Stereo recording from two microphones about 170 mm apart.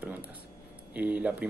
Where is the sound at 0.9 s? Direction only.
10° right (ahead or behind).